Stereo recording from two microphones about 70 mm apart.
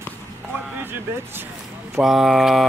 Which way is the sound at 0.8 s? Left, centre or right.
Right.